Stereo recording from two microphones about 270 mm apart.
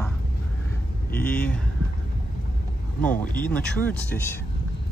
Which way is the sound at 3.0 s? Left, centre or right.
Centre.